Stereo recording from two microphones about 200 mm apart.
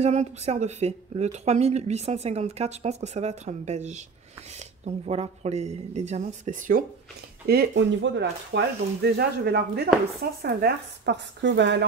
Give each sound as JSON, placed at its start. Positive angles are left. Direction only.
{"t": 0.0, "sound": "speech", "side_deg": -35}
{"t": 7.4, "sound": "speech", "side_deg": -55}